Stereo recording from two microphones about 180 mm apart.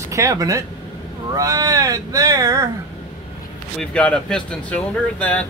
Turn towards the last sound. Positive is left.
turn(degrees=10)  # may be behind; listen again after turning